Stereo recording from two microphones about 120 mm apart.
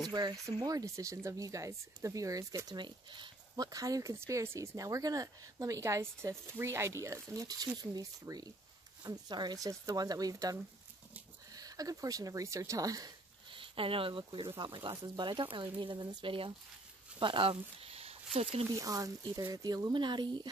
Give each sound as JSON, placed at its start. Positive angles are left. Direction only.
{"t": 0.1, "sound": "speech", "side_deg": -35}
{"t": 13.5, "sound": "speech", "side_deg": -45}
{"t": 18.8, "sound": "speech", "side_deg": -30}